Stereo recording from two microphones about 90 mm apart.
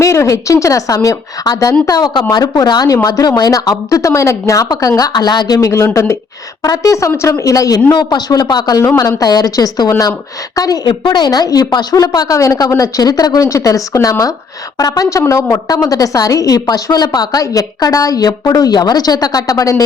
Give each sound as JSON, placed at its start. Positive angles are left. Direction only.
{"t": 0.0, "sound": "a woman's voice", "side_deg": 35}
{"t": 11.0, "sound": "a woman's voice", "side_deg": 55}
{"t": 16.6, "sound": "speech", "side_deg": 50}